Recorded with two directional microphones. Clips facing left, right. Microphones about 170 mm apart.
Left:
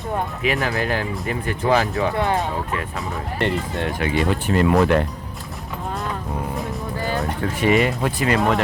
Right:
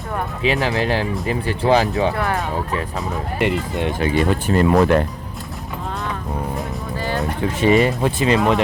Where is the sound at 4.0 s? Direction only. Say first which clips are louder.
Right 3 dB; 40° right (ahead or behind).